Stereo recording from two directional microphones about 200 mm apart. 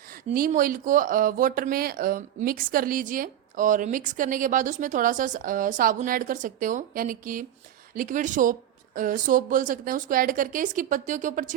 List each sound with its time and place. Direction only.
0.3 s speech: 40° right (ahead or behind)